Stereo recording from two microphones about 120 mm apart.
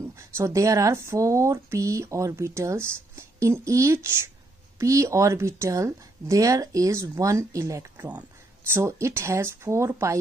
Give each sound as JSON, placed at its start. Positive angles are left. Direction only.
{"t": 0.2, "sound": "speech", "side_deg": -25}
{"t": 8.0, "sound": "speech", "side_deg": -10}
{"t": 8.7, "sound": "speech", "side_deg": -25}